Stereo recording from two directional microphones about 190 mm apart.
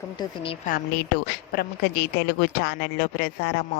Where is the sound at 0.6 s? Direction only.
45° left (ahead or behind).